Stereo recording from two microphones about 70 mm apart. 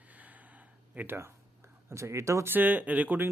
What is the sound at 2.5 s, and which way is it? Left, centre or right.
Speech, right.